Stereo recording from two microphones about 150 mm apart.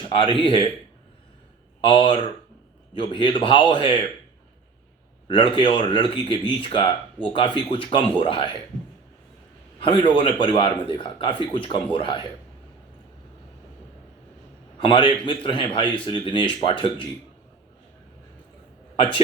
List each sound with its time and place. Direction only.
0.1 s speech: 35° left (ahead or behind)
1.8 s speech: 35° left (ahead or behind)
5.3 s speech: 35° left (ahead or behind)
9.8 s speech: 35° left (ahead or behind)
14.8 s speech: 35° left (ahead or behind)